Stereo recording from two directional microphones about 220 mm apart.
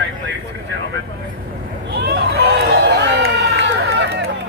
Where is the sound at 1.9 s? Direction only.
50° right (ahead or behind).